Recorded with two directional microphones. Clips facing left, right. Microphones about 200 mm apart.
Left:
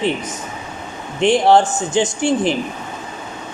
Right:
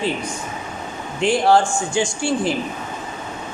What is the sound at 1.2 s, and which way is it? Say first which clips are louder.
A man's voice: left 3 dB; 20° left (ahead or behind).